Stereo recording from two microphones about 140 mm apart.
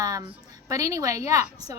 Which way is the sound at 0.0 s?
25° right (ahead or behind).